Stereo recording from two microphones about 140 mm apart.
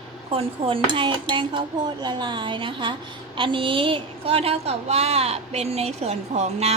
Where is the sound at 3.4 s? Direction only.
35° right (ahead or behind).